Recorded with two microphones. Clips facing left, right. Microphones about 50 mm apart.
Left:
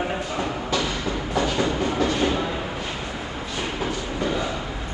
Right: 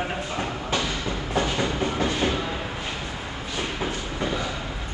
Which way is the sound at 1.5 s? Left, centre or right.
Left.